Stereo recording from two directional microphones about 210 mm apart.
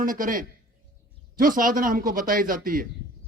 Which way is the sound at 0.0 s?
40° right (ahead or behind).